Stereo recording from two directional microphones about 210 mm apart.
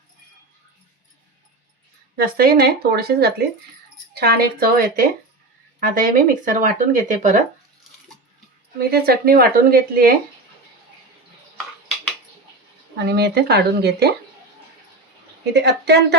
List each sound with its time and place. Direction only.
2.1 s speech: 45° right (ahead or behind)
8.8 s speech: 45° right (ahead or behind)
13.0 s speech: 50° right (ahead or behind)
15.5 s speech: 55° right (ahead or behind)